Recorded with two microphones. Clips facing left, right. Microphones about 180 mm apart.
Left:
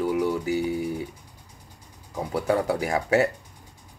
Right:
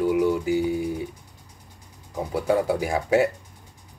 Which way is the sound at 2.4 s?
15° right (ahead or behind).